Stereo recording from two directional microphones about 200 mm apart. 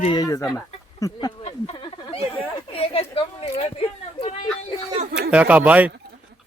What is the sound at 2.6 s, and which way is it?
A woman's voice, 30° left (ahead or behind).